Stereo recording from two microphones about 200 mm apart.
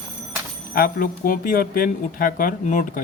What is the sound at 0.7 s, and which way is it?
Speech, 45° left (ahead or behind).